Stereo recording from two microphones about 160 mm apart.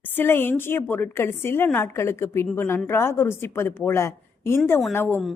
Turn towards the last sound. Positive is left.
turn(degrees=15)  # may be behind; listen again after turning